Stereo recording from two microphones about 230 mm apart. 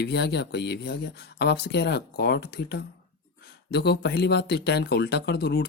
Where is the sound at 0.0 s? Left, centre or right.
Left.